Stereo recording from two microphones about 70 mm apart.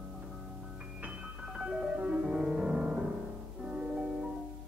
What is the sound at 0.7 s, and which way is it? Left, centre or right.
Music, centre.